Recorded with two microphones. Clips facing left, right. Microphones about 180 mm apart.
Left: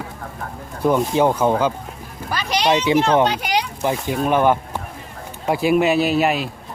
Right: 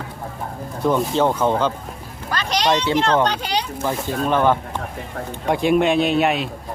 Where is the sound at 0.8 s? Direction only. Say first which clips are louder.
Left 2 dB; 10° left (ahead or behind).